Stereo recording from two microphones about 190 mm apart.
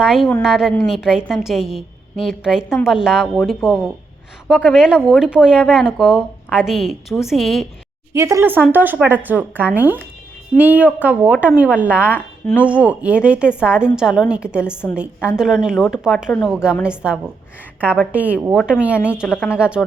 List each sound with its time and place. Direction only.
0.0 s a woman's voice: centre (ahead or behind)
8.1 s a woman's voice: 15° right (ahead or behind)
19.3 s speech: 10° left (ahead or behind)
19.5 s a woman's voice: 5° right (ahead or behind)